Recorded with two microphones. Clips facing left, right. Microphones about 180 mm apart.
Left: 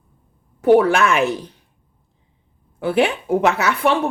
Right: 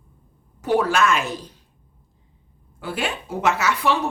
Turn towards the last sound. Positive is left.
turn(degrees=55)  # may be behind; listen again after turning